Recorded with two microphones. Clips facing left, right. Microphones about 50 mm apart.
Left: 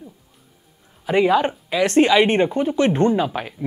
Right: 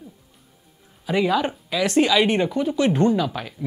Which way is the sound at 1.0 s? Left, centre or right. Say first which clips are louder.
Left 4 dB; left.